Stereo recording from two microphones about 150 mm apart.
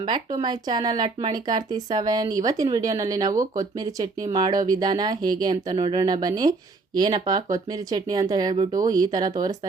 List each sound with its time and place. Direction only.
0.0 s speech: 30° right (ahead or behind)
5.7 s speech: 40° right (ahead or behind)